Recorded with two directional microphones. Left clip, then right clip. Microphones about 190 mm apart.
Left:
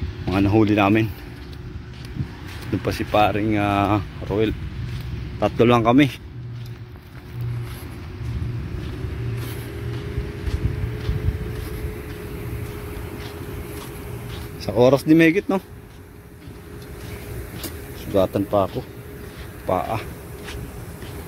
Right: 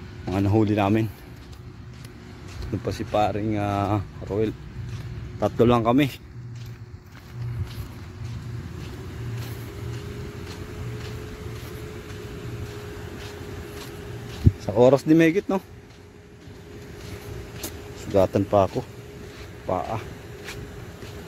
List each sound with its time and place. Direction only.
0.2 s speech: 10° right (ahead or behind)
2.8 s speech: centre (ahead or behind)
14.6 s speech: 15° right (ahead or behind)
17.6 s vehicle: 20° right (ahead or behind)
19.7 s speech: centre (ahead or behind)